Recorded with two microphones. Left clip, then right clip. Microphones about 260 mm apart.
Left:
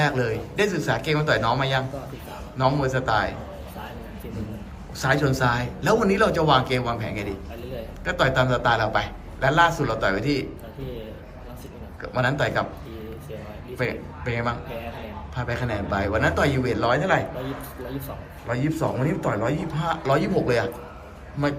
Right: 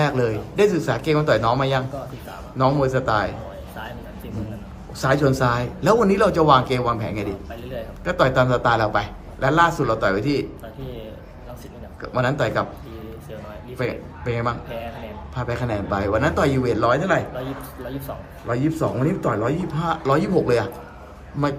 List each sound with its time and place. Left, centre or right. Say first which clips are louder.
0.0 s speech: right 2 dB; centre
4.9 s speech: right 3 dB; centre
12.0 s speech: right 2 dB; centre
13.7 s speech: right 1 dB; centre
18.4 s speech: right 3 dB; centre